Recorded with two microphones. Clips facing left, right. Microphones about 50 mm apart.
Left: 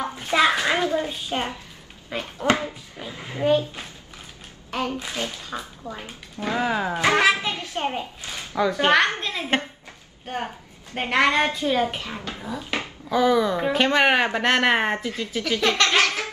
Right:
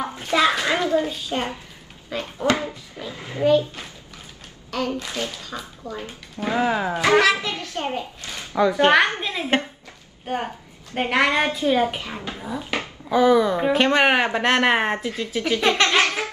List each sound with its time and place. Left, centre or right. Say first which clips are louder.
0.0 s a sound: right 1 dB; centre
0.3 s a child's voice: even; centre
2.6 s a sound: right 1 dB; centre
4.6 s speech: right 1 dB; left
6.4 s speech: right 2 dB; centre
7.1 s a child's voice: right 2 dB; centre
8.0 s a woman's voice: even; centre
8.5 s a woman's voice: right 3 dB; centre
15.4 s a woman's voice: right 2 dB; centre
16.0 s laughter: right 1 dB; right